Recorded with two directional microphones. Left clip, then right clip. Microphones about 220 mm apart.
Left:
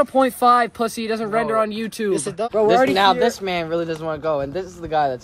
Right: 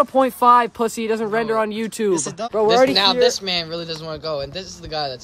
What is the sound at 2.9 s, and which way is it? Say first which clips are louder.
Speech: even; 25° left (ahead or behind).